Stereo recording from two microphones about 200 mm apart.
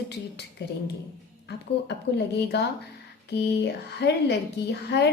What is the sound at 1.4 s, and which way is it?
A woman's voice, 60° left (ahead or behind).